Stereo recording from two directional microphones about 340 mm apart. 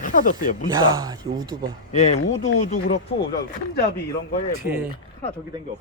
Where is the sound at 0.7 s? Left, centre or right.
Centre.